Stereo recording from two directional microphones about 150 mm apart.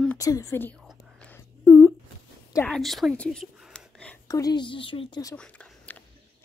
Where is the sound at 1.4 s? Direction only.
20° left (ahead or behind).